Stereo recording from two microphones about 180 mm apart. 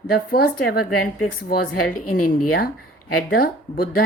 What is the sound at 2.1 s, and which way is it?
Speech, 55° left (ahead or behind).